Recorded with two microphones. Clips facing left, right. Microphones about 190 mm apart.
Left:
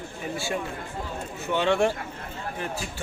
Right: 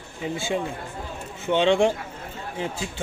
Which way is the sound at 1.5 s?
20° right (ahead or behind).